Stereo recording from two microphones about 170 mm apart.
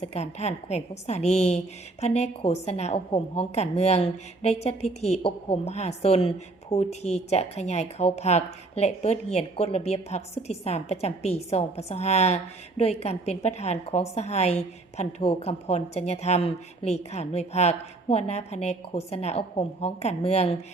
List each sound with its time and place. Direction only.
0.0 s a woman's voice: 40° left (ahead or behind)